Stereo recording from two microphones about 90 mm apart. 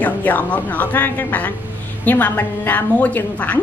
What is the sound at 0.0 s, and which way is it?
A woman's voice, 15° left (ahead or behind).